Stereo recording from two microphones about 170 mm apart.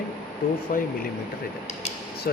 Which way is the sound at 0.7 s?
50° left (ahead or behind).